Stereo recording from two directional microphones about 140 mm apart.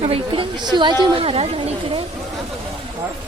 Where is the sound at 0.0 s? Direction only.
45° right (ahead or behind).